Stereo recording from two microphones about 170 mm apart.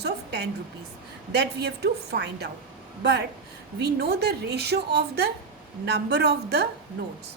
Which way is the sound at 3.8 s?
75° right (ahead or behind).